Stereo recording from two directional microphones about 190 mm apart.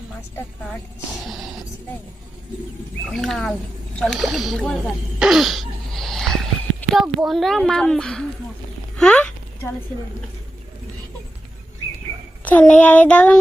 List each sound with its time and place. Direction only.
1.2 s a woman's voice: centre (ahead or behind)
3.1 s a woman's voice: centre (ahead or behind)
5.2 s a sound: centre (ahead or behind)
6.9 s a woman's voice: centre (ahead or behind)
9.0 s a sound: 5° left (ahead or behind)
12.5 s child singing: 10° left (ahead or behind)